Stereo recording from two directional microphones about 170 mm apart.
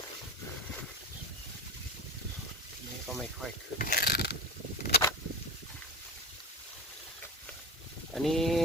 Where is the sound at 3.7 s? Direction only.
55° left (ahead or behind).